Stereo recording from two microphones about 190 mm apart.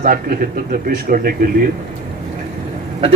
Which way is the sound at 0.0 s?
50° right (ahead or behind).